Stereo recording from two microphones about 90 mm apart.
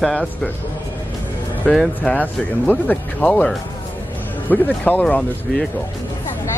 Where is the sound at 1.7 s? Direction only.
10° left (ahead or behind).